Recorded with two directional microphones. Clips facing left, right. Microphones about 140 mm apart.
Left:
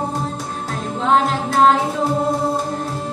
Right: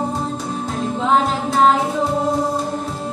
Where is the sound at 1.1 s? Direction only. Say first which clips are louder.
Left 2 dB; 5° right (ahead or behind).